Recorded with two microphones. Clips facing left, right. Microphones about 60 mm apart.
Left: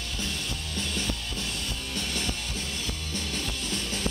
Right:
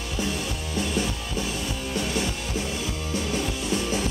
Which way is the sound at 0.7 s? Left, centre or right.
Centre.